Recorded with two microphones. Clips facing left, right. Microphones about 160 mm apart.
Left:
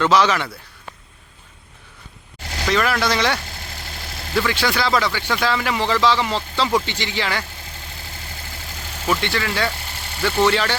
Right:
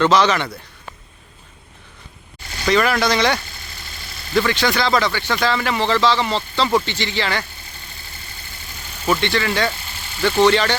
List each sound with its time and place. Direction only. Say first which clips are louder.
0.0 s speech: right 1 dB; 5° left (ahead or behind)
2.4 s a sound: left 4 dB; 80° left
2.6 s speech: right 3 dB; centre (ahead or behind)
3.4 s vehicle: left 4 dB; 90° left
4.4 s speech: right 2 dB; 5° left (ahead or behind)
7.4 s vehicle: left 3 dB; 90° left
9.0 s speech: right 3 dB; 5° left (ahead or behind)
9.7 s vehicle: left 2 dB; 70° left (ahead or behind)
10.2 s speech: right 3 dB; 5° left (ahead or behind)